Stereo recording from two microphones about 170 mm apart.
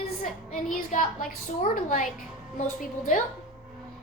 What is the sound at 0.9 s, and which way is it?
A child's voice, 55° left (ahead or behind).